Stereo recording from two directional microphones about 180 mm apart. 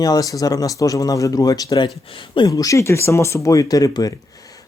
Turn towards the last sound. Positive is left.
turn(degrees=20)  # may be behind; listen again after turning